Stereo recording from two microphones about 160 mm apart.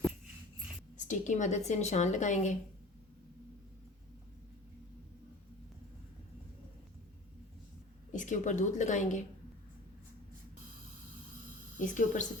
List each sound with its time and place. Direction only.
0.9 s speech: 50° left (ahead or behind)
8.1 s speech: 50° left (ahead or behind)
11.8 s speech: 50° left (ahead or behind)